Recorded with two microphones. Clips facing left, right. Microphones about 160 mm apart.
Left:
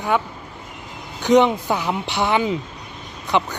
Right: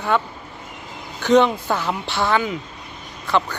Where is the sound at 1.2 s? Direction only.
15° left (ahead or behind).